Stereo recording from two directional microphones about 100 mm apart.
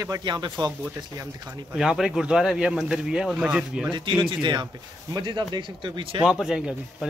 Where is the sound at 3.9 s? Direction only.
50° right (ahead or behind).